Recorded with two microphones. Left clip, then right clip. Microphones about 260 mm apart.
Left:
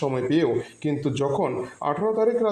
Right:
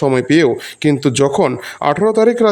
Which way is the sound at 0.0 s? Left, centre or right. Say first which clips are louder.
Right 10 dB; right.